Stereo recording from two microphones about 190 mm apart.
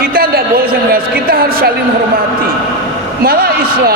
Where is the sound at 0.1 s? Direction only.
50° right (ahead or behind).